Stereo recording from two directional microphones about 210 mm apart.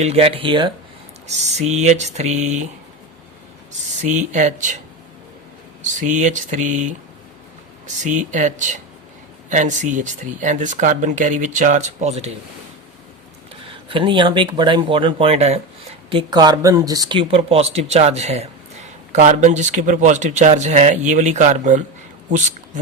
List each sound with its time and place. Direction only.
0.0 s speech: 30° right (ahead or behind)
4.0 s speech: 35° right (ahead or behind)
5.8 s speech: 35° right (ahead or behind)
8.0 s speech: 35° right (ahead or behind)
13.8 s speech: 25° right (ahead or behind)